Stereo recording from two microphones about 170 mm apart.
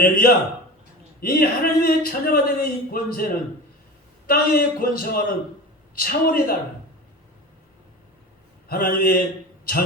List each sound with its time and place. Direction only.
0.0 s speech: 60° left (ahead or behind)
4.3 s speech: 60° left (ahead or behind)
8.7 s speech: 60° left (ahead or behind)